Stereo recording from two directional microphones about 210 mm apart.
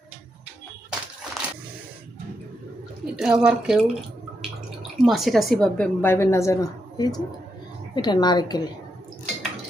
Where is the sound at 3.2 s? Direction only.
5° right (ahead or behind).